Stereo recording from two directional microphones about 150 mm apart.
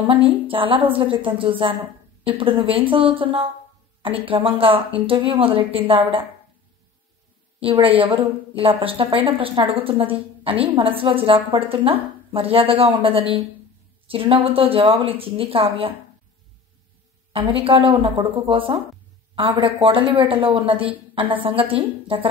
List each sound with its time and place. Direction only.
0.0 s a woman's voice: 35° right (ahead or behind)
7.6 s a woman's voice: 35° right (ahead or behind)
17.3 s a woman's voice: 35° right (ahead or behind)